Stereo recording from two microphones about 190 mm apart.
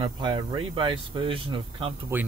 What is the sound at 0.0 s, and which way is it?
Speech, 25° right (ahead or behind).